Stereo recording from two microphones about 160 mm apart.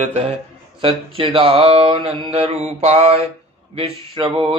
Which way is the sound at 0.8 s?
35° right (ahead or behind).